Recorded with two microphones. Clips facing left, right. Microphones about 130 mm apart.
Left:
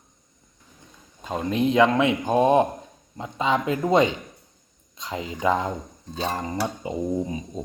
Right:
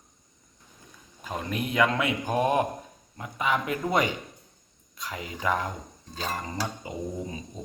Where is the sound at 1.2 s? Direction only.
25° left (ahead or behind).